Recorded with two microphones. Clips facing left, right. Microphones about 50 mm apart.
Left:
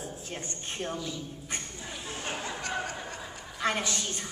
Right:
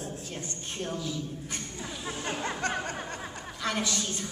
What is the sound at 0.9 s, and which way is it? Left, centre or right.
Speech, centre.